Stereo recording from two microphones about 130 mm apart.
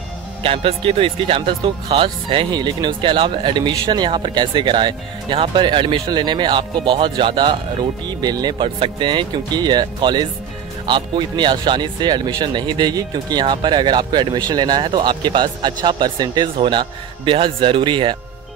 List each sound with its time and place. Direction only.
0.4 s speech: 45° right (ahead or behind)